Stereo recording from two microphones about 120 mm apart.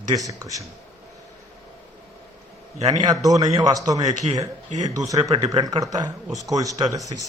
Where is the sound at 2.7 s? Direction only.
60° right (ahead or behind).